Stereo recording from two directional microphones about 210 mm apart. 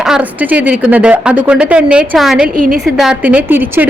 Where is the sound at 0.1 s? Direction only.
5° right (ahead or behind).